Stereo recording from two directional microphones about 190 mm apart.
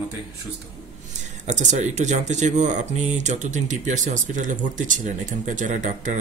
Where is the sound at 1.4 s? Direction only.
40° right (ahead or behind).